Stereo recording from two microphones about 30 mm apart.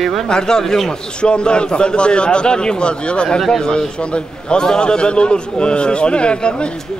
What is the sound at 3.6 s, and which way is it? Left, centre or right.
Speech, left.